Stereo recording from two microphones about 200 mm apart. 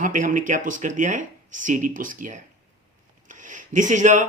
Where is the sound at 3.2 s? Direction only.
40° right (ahead or behind).